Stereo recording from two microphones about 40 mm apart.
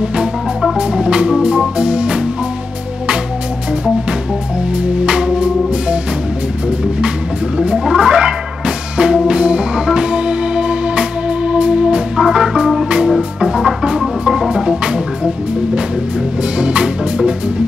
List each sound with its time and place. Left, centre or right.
1.0 s organ: right
4.7 s music: right
7.5 s music: centre
12.2 s organ: centre
13.4 s music: centre
13.8 s organ: centre
16.5 s music: right